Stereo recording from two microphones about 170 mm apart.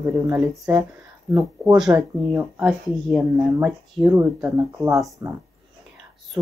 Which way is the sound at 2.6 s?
5° right (ahead or behind).